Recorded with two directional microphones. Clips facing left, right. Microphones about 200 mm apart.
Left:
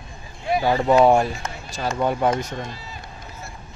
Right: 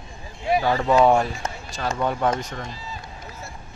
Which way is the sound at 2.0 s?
10° left (ahead or behind).